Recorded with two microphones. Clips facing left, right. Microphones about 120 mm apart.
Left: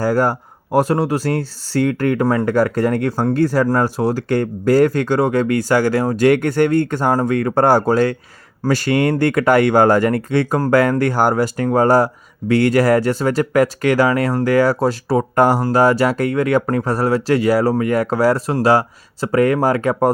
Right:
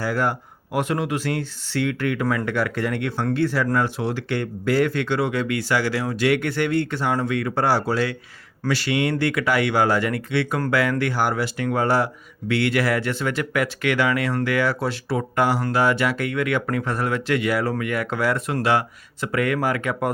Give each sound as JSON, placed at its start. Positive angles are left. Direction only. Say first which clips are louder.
{"t": 0.0, "sound": "speech", "louder": "left 7 dB", "side_deg": 40}